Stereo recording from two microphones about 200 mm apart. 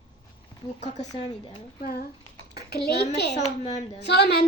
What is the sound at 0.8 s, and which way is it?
Speech, 35° left (ahead or behind).